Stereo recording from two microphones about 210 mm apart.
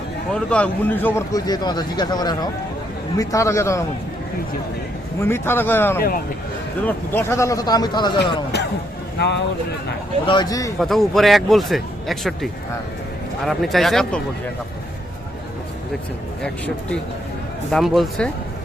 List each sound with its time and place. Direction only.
0.3 s speech: 5° left (ahead or behind)
5.2 s speech: 10° left (ahead or behind)
6.0 s speech: 45° left (ahead or behind)
6.8 s speech: 10° left (ahead or behind)
9.1 s speech: 55° left (ahead or behind)
10.2 s speech: 20° left (ahead or behind)
10.8 s speech: centre (ahead or behind)
16.4 s speech: 5° left (ahead or behind)